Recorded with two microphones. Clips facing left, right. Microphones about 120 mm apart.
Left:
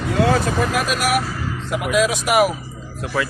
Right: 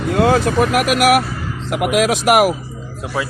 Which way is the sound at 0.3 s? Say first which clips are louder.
Right 4 dB; 65° right (ahead or behind).